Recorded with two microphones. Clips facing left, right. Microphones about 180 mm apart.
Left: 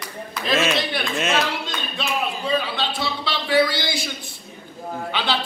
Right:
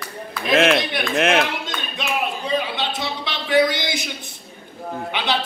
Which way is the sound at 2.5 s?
20° right (ahead or behind).